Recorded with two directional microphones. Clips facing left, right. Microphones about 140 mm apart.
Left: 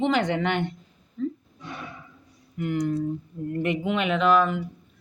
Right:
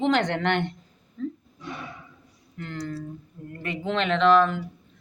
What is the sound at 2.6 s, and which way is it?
Speech, 15° left (ahead or behind).